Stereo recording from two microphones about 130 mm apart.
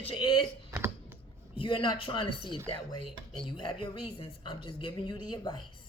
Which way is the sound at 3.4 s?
35° left (ahead or behind).